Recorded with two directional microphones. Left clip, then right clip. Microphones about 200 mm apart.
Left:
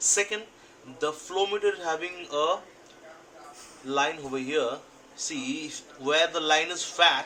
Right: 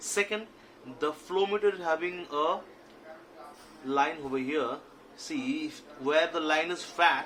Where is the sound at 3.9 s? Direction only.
30° right (ahead or behind).